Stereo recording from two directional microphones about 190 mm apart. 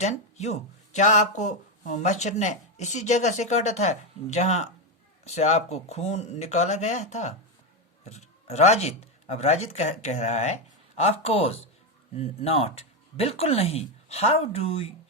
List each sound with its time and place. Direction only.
0.0 s speech: 35° left (ahead or behind)